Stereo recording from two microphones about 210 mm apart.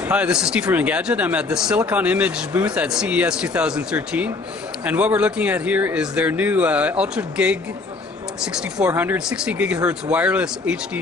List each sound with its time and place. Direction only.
0.0 s speech: 5° right (ahead or behind)